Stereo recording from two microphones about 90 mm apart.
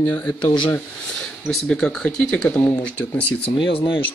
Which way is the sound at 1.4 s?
5° left (ahead or behind).